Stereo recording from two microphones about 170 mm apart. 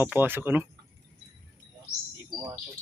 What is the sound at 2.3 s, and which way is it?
Speech, 20° right (ahead or behind).